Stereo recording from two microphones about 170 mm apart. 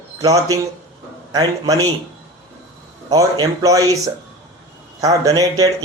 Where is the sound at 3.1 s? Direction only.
20° right (ahead or behind).